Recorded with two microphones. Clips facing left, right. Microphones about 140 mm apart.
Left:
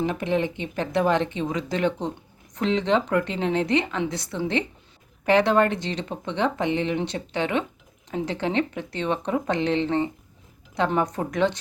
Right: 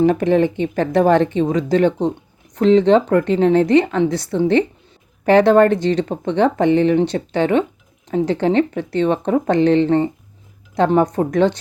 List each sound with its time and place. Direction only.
0.0 s speech: 45° right (ahead or behind)